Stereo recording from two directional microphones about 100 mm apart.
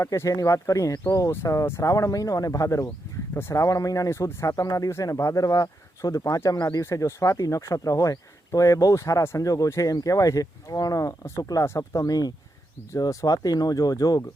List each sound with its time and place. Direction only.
0.0 s speech: 35° left (ahead or behind)